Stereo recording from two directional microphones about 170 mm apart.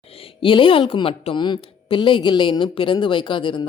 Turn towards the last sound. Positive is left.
turn(degrees=30)  # may be behind; listen again after turning